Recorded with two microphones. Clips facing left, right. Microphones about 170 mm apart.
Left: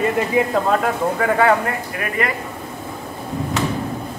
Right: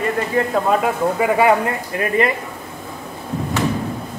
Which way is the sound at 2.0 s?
25° right (ahead or behind).